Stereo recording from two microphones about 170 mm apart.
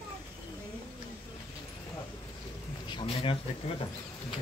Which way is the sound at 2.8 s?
30° left (ahead or behind).